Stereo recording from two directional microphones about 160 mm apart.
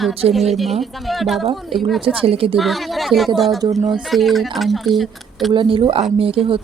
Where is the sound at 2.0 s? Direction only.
35° right (ahead or behind).